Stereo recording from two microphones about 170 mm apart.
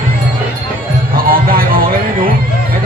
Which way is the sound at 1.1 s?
55° right (ahead or behind).